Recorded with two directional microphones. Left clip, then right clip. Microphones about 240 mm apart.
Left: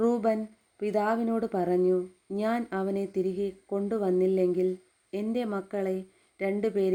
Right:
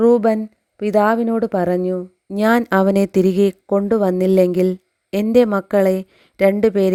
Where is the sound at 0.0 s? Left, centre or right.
Right.